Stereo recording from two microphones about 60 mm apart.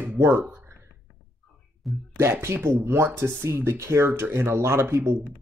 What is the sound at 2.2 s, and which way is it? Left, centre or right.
Speech, right.